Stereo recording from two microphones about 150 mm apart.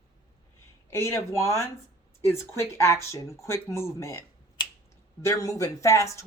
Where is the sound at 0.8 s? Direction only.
15° left (ahead or behind).